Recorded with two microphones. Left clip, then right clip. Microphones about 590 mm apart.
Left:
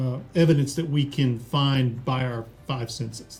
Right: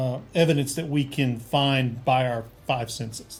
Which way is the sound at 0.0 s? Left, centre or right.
Right.